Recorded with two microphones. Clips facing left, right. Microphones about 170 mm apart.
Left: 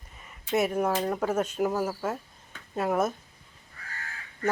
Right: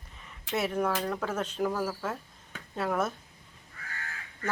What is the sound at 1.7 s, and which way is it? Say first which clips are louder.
Speech: left 3 dB; 25° left (ahead or behind).